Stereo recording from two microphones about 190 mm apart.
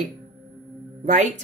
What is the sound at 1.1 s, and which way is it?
Speech, 40° right (ahead or behind).